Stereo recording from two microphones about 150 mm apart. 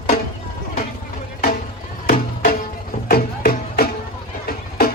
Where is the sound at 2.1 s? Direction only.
70° left (ahead or behind).